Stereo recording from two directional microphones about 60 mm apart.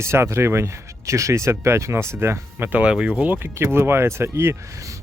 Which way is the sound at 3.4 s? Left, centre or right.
Right.